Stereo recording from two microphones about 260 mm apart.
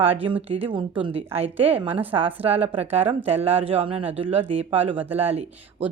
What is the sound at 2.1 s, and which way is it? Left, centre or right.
A woman's voice, right.